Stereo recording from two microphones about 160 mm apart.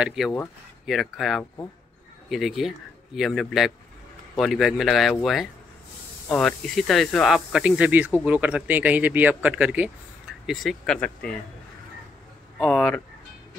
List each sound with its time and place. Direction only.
0.0 s speech: 5° right (ahead or behind)
12.5 s speech: 5° left (ahead or behind)